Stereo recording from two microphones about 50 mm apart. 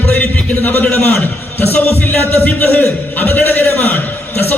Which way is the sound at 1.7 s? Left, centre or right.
Left.